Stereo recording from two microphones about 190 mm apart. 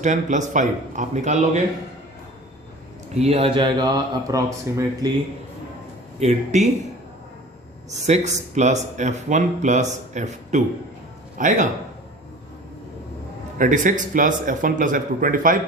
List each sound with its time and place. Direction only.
0.0 s speech: 40° right (ahead or behind)
3.2 s speech: 30° right (ahead or behind)
6.1 s speech: 35° right (ahead or behind)
8.0 s speech: 35° right (ahead or behind)
13.6 s speech: 45° right (ahead or behind)